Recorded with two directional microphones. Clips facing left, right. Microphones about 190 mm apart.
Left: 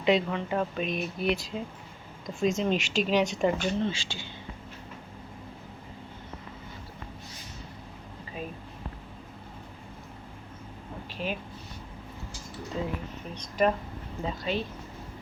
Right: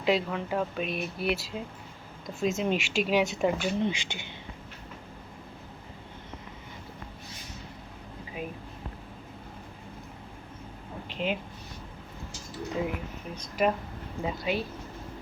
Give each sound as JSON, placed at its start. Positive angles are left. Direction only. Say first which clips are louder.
{"t": 0.0, "sound": "speech", "louder": "left 2 dB", "side_deg": -5}
{"t": 11.1, "sound": "a sound", "louder": "right 3 dB", "side_deg": -20}
{"t": 13.3, "sound": "speech", "louder": "left 1 dB", "side_deg": -5}